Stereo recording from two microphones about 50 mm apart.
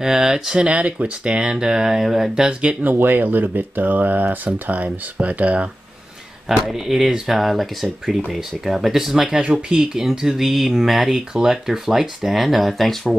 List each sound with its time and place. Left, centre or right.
0.0 s speech: centre
0.7 s speech: right
2.8 s speech: right
6.5 s speech: centre
9.3 s speech: centre
9.9 s speech: centre